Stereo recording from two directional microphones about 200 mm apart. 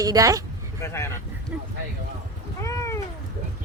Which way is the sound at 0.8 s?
15° left (ahead or behind).